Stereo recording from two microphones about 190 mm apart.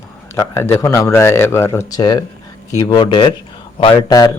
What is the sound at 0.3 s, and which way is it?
A man's voice, 15° left (ahead or behind).